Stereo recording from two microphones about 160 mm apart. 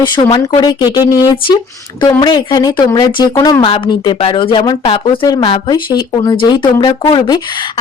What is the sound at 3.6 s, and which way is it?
Speech, 30° left (ahead or behind).